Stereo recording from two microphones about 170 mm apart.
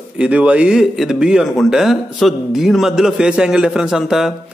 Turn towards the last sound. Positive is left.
turn(degrees=0)  # may be behind; listen again after turning